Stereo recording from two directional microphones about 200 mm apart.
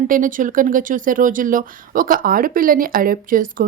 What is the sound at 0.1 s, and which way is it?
Speech, 40° right (ahead or behind).